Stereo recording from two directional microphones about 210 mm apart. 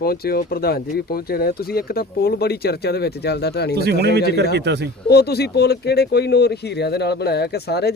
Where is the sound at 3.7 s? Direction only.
50° right (ahead or behind).